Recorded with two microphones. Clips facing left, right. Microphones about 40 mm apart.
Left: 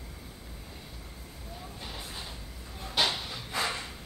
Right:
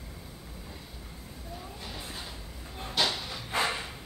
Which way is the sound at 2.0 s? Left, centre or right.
Centre.